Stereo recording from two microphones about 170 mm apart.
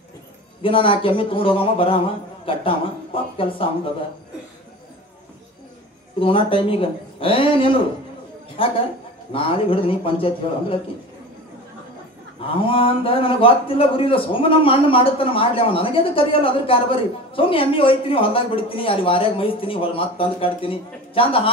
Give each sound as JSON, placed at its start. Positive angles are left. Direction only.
{"t": 0.6, "sound": "a man's voice", "side_deg": 30}
{"t": 6.1, "sound": "a man's voice", "side_deg": 30}
{"t": 12.6, "sound": "a man's voice", "side_deg": 30}